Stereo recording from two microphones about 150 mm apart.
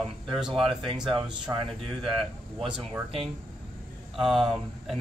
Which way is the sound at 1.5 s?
20° right (ahead or behind).